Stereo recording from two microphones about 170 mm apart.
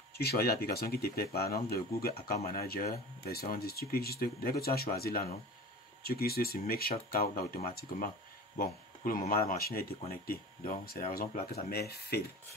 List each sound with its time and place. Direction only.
0.1 s speech: 70° left (ahead or behind)